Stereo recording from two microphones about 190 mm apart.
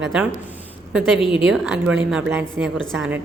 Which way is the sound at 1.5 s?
5° right (ahead or behind).